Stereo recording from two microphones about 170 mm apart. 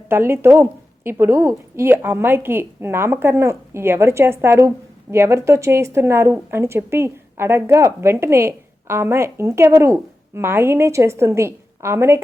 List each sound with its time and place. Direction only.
0.1 s speech: 15° right (ahead or behind)